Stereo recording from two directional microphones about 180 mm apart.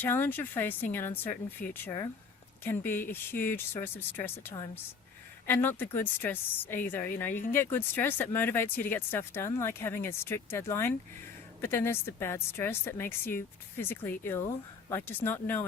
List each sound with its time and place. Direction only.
0.0 s speech: 10° left (ahead or behind)
5.5 s speech: 10° left (ahead or behind)